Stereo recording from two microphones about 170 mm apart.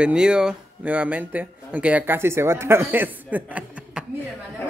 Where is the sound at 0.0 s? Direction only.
5° right (ahead or behind).